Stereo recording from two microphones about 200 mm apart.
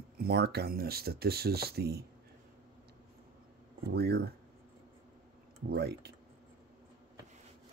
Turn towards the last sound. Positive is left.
turn(degrees=-55)  # may be behind; listen again after turning